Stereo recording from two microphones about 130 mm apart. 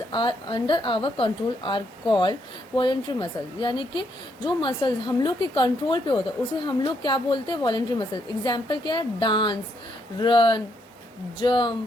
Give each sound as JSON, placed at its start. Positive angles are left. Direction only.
{"t": 0.1, "sound": "a woman's voice", "side_deg": 40}